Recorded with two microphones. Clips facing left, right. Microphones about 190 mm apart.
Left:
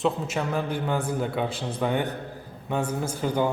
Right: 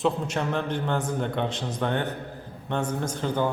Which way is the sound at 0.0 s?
5° left (ahead or behind).